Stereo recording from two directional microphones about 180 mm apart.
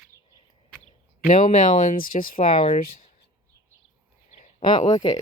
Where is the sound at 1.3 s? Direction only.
45° left (ahead or behind).